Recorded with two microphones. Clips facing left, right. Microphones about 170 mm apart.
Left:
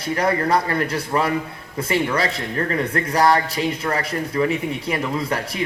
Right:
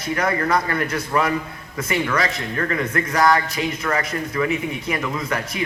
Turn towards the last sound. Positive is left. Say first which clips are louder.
# left 2 dB
turn(degrees=30)  # may be behind; listen again after turning